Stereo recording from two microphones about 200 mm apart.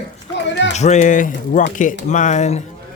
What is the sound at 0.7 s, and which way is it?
Speech, 35° left (ahead or behind).